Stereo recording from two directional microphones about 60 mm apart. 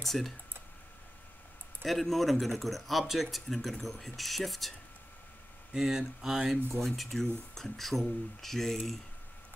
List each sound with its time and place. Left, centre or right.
0.0 s speech: centre
1.9 s speech: centre
5.7 s speech: centre
6.8 s speech: centre